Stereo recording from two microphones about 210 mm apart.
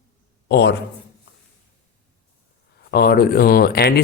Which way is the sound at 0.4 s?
55° left (ahead or behind).